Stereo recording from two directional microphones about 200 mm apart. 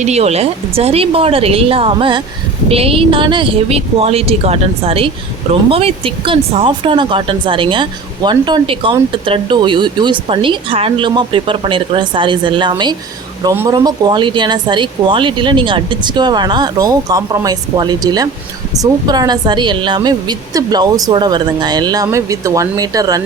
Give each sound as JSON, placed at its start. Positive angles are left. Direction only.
{"t": 0.0, "sound": "speech", "side_deg": -35}